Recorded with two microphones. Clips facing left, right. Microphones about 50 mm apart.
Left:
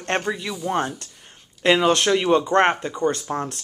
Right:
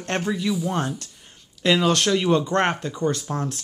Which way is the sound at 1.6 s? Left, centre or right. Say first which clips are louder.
Left 2 dB; left.